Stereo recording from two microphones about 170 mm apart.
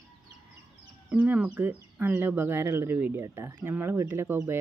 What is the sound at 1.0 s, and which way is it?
Speech, 10° right (ahead or behind).